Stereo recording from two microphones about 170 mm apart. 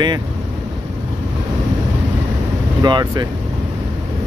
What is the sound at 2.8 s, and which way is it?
Speech, 25° right (ahead or behind).